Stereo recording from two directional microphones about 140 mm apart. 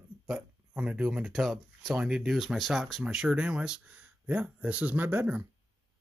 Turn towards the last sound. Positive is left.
turn(degrees=-10)  # may be behind; listen again after turning